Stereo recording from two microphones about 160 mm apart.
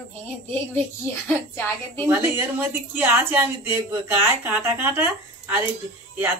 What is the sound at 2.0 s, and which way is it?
A woman's voice, 10° right (ahead or behind).